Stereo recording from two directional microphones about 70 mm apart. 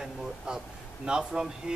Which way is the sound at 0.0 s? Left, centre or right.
Centre.